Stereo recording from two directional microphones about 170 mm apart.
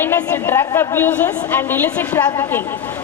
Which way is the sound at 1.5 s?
10° left (ahead or behind).